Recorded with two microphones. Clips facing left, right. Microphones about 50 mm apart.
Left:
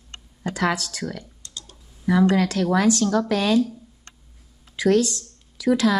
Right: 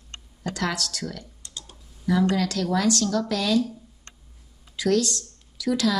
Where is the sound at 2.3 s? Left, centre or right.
Left.